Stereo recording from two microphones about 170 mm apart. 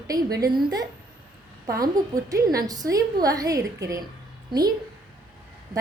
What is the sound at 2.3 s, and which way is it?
A woman's voice, 20° right (ahead or behind).